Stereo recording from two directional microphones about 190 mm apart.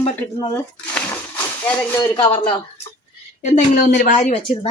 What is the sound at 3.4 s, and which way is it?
A woman's voice, 40° left (ahead or behind).